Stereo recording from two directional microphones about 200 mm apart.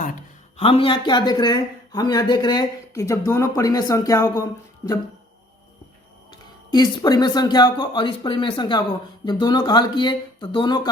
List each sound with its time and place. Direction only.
0.5 s speech: 30° left (ahead or behind)
6.7 s speech: 20° left (ahead or behind)